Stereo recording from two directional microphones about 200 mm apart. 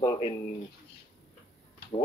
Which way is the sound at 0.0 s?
25° left (ahead or behind).